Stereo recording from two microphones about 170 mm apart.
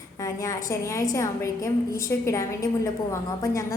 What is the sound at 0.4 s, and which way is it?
A woman's voice, 20° left (ahead or behind).